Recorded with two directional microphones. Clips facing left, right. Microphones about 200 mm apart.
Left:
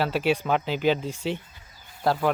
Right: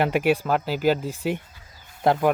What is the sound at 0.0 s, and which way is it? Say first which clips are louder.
Speech: right 3 dB; 15° right (ahead or behind).